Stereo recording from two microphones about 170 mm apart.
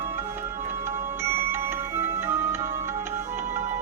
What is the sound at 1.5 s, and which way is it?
Music, 15° right (ahead or behind).